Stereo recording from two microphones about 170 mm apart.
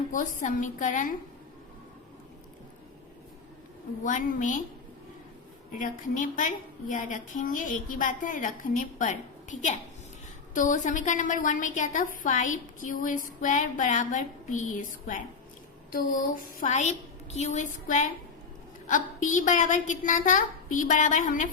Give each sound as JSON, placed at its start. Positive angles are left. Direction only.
{"t": 0.1, "sound": "a woman's voice", "side_deg": 50}
{"t": 4.0, "sound": "a woman's voice", "side_deg": 50}
{"t": 5.7, "sound": "a woman's voice", "side_deg": 50}